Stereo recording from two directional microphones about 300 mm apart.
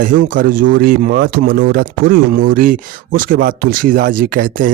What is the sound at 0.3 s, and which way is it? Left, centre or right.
Speech, right.